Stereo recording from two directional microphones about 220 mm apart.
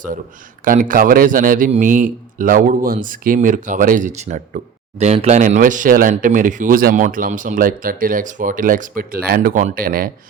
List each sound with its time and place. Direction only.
0.6 s a man's voice: 40° right (ahead or behind)